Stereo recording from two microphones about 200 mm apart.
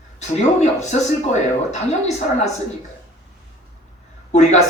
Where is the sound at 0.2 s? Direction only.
35° left (ahead or behind).